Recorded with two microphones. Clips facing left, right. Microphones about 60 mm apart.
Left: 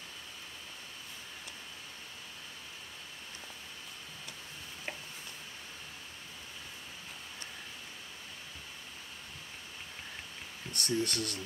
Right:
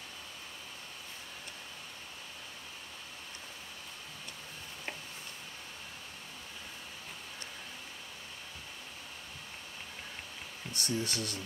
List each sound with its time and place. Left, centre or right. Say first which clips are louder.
10.7 s speech: left 2 dB; left